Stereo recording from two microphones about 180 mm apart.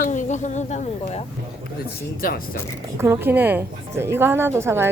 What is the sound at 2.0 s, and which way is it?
Speech, 55° left (ahead or behind).